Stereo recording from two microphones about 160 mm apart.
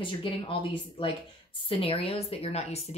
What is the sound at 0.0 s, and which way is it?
A woman's voice, 30° left (ahead or behind).